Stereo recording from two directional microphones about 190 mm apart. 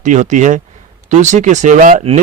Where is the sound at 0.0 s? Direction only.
40° right (ahead or behind).